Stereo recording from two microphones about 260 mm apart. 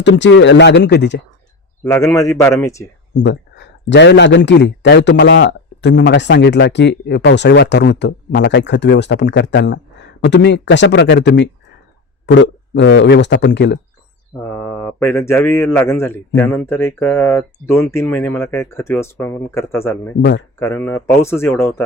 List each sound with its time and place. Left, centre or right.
0.0 s speech: left
1.8 s a man's voice: centre
3.2 s speech: left
14.5 s a man's voice: centre